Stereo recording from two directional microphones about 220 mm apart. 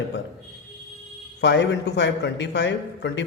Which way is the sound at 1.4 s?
50° left (ahead or behind).